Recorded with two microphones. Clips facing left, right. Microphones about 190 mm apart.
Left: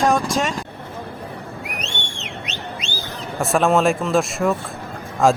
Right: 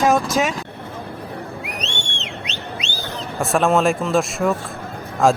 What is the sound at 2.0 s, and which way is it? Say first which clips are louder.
Whistle: right 1 dB; 70° right (ahead or behind).